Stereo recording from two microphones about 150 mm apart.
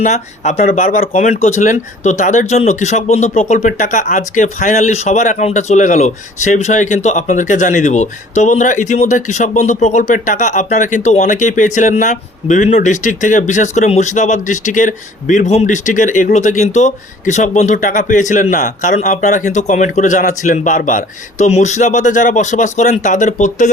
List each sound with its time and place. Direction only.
0.0 s speech: 50° left (ahead or behind)
0.7 s speech: 75° left (ahead or behind); by 23.6 s 55° left (ahead or behind)